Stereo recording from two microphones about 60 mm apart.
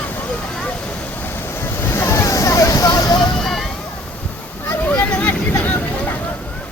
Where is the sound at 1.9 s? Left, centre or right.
Left.